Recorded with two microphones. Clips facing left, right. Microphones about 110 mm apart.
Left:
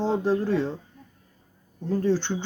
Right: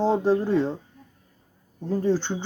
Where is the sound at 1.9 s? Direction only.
15° right (ahead or behind).